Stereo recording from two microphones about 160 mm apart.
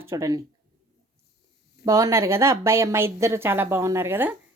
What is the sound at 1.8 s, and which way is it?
A woman's voice, 20° right (ahead or behind).